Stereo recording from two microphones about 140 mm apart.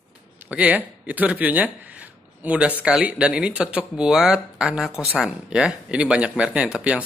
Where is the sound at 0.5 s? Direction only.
10° right (ahead or behind).